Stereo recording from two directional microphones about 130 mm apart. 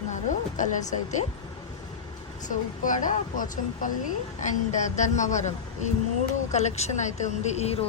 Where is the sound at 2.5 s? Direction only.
85° left.